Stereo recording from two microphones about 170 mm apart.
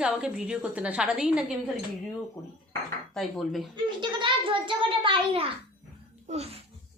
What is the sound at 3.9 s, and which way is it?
A child's voice, 30° right (ahead or behind).